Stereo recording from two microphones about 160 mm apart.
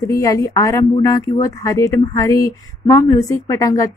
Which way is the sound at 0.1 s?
20° left (ahead or behind).